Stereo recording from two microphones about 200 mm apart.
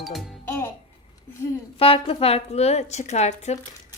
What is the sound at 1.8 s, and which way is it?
A woman's voice, 30° left (ahead or behind).